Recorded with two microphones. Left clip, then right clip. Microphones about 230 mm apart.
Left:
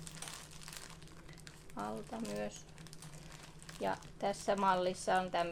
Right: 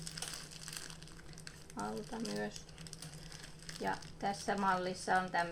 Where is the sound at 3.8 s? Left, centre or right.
Left.